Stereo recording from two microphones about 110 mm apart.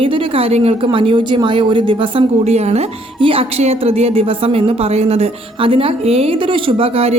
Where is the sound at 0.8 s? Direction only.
50° right (ahead or behind).